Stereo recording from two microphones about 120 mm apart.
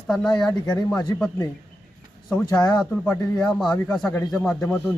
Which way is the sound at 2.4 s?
35° left (ahead or behind).